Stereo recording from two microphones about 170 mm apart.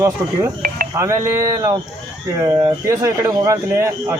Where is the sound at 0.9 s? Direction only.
15° right (ahead or behind).